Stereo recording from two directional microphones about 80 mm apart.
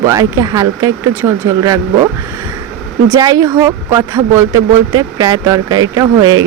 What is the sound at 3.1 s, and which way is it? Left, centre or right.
Speech, right.